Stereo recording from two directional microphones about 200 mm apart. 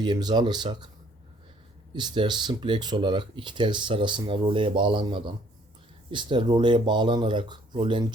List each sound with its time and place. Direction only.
0.0 s speech: 20° right (ahead or behind)
1.9 s speech: 20° right (ahead or behind)